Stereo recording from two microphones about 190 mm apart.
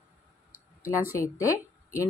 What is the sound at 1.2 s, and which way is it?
Speech, 15° left (ahead or behind).